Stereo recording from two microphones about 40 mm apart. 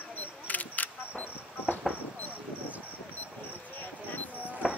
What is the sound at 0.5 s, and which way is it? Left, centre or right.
Single-lens reflex camera, left.